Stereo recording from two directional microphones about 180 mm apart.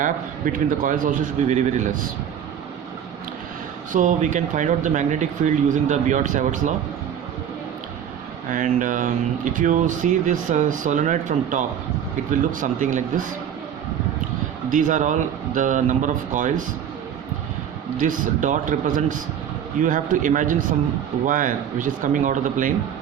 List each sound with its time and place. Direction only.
0.0 s speech: 50° right (ahead or behind)
3.9 s speech: 45° right (ahead or behind)
8.4 s speech: 45° right (ahead or behind)
14.7 s speech: 45° right (ahead or behind)
18.0 s speech: 45° right (ahead or behind)